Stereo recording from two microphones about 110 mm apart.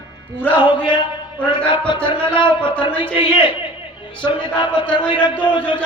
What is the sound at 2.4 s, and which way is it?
A man's voice, 50° left (ahead or behind).